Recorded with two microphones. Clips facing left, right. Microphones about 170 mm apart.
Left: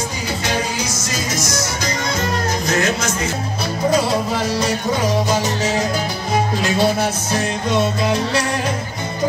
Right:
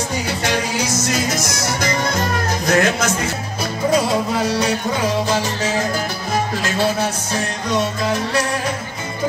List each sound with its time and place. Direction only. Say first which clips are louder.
2.6 s speech: right 5 dB; 55° right (ahead or behind)
5.3 s music: left 1 dB; 15° left (ahead or behind)